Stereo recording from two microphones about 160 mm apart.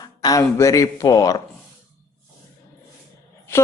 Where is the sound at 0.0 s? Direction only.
25° left (ahead or behind).